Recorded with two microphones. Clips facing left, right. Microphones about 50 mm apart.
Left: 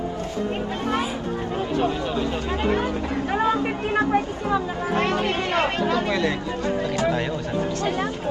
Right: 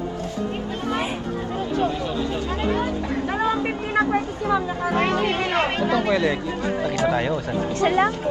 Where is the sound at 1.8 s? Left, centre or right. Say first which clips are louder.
Even; centre.